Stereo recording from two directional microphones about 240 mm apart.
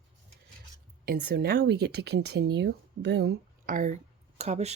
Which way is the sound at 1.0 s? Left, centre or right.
Right.